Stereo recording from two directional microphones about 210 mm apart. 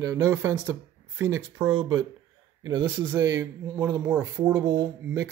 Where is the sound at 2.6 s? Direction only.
20° right (ahead or behind).